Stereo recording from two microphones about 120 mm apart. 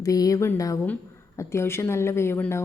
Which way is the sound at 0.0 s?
30° left (ahead or behind).